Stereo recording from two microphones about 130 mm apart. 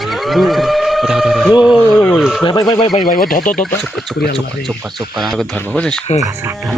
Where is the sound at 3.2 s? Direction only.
90° left.